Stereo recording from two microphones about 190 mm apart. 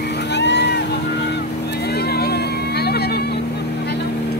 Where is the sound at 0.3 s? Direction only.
65° left (ahead or behind).